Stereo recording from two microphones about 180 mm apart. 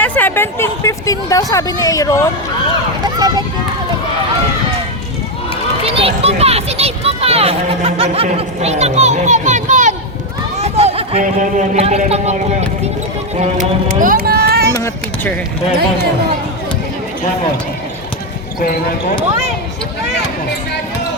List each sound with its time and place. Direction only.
0.0 s speech: 10° left (ahead or behind)
3.2 s speech: 20° right (ahead or behind)
5.8 s a child's voice: 30° right (ahead or behind)
10.6 s run: 35° right (ahead or behind)
11.2 s a child's voice: 45° right (ahead or behind); by 14.8 s 60° right (ahead or behind)
14.8 s a sound: 15° left (ahead or behind)
18.6 s speech: 55° left (ahead or behind)